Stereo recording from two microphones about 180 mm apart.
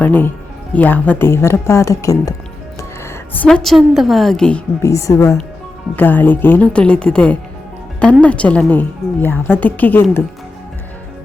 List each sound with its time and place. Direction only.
0.0 s a woman's voice: 10° left (ahead or behind)
3.0 s a woman's voice: 5° left (ahead or behind)
4.9 s a woman's voice: 15° left (ahead or behind)